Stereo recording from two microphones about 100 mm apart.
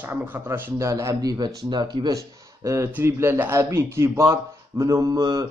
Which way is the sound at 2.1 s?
30° right (ahead or behind).